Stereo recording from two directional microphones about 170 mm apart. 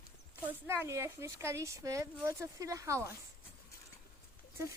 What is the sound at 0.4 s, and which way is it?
Speech, 15° right (ahead or behind).